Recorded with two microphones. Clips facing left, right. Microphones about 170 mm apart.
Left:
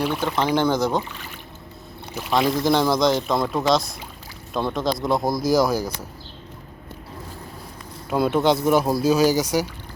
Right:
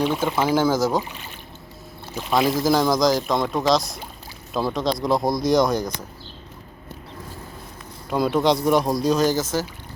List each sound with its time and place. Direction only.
0.0 s speech: 5° right (ahead or behind)
1.0 s speech: 20° right (ahead or behind)
2.5 s speech: centre (ahead or behind)
8.1 s speech: centre (ahead or behind)